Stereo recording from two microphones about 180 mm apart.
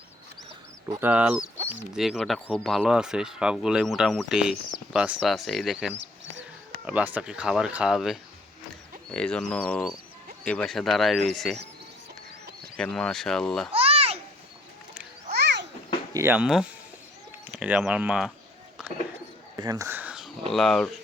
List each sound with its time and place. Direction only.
1.0 s speech: 5° right (ahead or behind)
12.7 s speech: 5° left (ahead or behind)
13.7 s babbling: 35° right (ahead or behind)
15.3 s a sound: 65° right (ahead or behind)
16.1 s speech: 10° right (ahead or behind)
19.5 s a sound: 20° right (ahead or behind); by 20.3 s 5° right (ahead or behind)
20.5 s speech: centre (ahead or behind)